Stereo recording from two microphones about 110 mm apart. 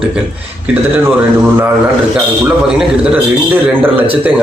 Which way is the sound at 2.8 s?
15° right (ahead or behind).